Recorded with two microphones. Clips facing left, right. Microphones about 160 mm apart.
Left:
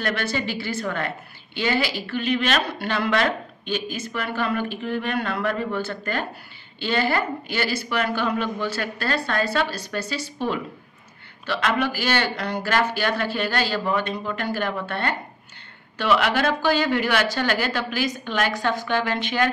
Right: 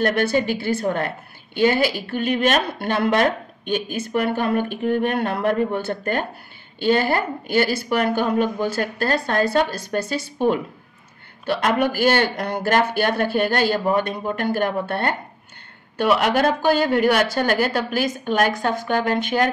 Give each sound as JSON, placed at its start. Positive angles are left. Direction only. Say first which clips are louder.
{"t": 0.0, "sound": "a woman's voice", "louder": "right 7 dB", "side_deg": -50}